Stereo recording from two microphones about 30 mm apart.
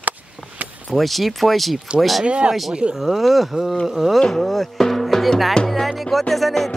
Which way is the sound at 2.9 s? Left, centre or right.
Centre.